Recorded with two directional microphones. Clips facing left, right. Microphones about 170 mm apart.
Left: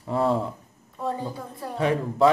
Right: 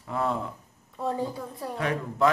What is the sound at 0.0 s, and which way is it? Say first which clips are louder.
Speech: left 5 dB; 30° left (ahead or behind).